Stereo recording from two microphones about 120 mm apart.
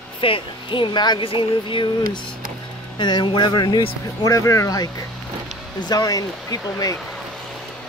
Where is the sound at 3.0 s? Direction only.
40° left (ahead or behind).